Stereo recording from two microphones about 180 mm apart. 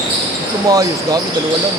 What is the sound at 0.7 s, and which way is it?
Speech, 20° right (ahead or behind).